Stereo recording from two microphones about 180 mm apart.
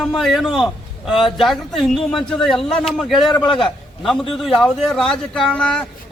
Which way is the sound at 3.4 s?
25° left (ahead or behind).